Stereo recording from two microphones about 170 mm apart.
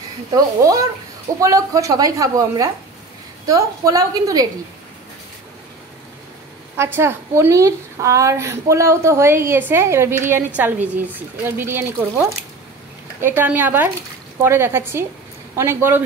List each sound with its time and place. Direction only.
0.3 s a woman's voice: 20° right (ahead or behind)
6.8 s a woman's voice: 15° right (ahead or behind)
13.2 s a woman's voice: 10° right (ahead or behind)